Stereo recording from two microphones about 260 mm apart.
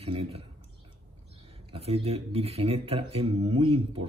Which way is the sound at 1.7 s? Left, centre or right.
Right.